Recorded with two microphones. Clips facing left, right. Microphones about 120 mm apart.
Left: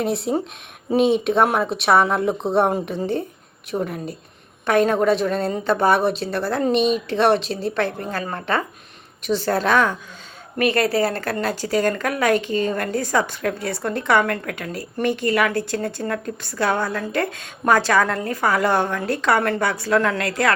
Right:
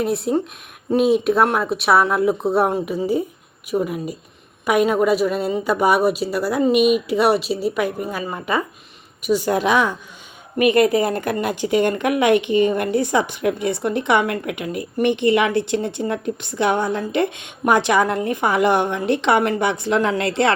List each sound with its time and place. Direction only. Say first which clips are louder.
0.0 s speech: right 2 dB; centre (ahead or behind); by 20.5 s 25° right (ahead or behind)